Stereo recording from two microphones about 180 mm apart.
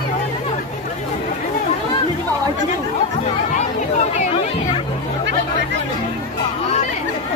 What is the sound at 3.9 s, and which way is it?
Music, 40° left (ahead or behind).